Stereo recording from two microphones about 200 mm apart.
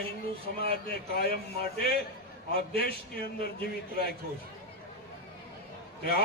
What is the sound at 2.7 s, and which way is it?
Speech, 50° left (ahead or behind).